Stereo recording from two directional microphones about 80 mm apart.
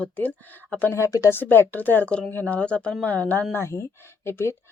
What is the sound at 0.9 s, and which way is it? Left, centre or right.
Speech, left.